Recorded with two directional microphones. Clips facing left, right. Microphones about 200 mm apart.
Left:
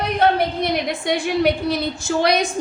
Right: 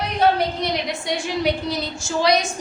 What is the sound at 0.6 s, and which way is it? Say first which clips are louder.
A woman's voice: left 3 dB; 55° left (ahead or behind).